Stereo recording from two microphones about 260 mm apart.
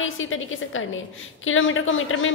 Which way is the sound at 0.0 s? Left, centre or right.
Left.